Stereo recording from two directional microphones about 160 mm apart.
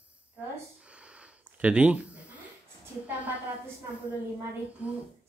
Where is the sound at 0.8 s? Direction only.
5° right (ahead or behind).